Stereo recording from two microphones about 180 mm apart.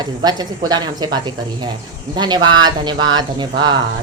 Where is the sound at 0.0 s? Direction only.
20° right (ahead or behind).